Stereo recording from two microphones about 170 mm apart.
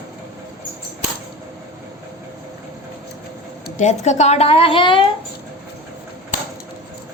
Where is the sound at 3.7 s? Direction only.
45° left (ahead or behind).